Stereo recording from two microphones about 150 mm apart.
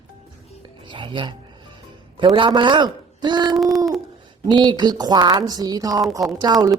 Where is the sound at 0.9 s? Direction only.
35° right (ahead or behind).